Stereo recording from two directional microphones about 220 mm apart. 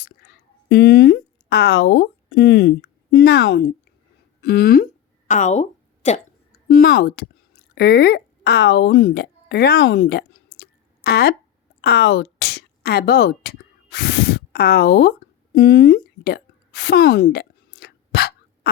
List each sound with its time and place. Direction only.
0.0 s speech: 45° left (ahead or behind)
5.3 s speech: 35° left (ahead or behind)
6.5 s speech: 45° left (ahead or behind)
10.6 s drip: 45° left (ahead or behind)
11.8 s speech: 50° left (ahead or behind)
15.5 s a sound: 45° left (ahead or behind)